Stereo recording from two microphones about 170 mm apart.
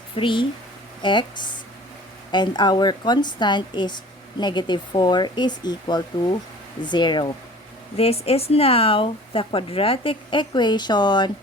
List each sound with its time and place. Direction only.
0.2 s a woman's voice: 30° left (ahead or behind)